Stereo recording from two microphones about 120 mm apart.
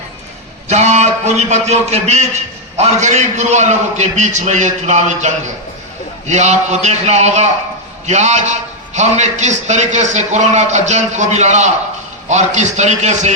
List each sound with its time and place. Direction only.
0.7 s a man's voice: 70° right (ahead or behind)